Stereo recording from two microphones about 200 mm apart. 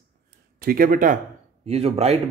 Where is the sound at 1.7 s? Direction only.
30° right (ahead or behind).